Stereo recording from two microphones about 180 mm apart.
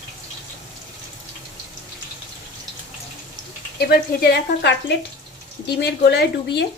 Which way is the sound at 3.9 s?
60° left (ahead or behind).